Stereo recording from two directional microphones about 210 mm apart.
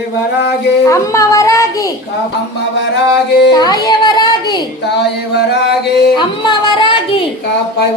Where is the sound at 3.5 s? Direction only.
20° left (ahead or behind).